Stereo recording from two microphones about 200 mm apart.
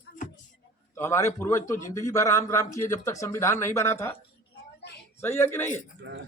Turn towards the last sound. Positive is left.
turn(degrees=10)  # may be behind; listen again after turning